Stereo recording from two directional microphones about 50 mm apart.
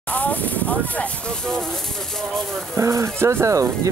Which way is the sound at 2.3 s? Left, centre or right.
Centre.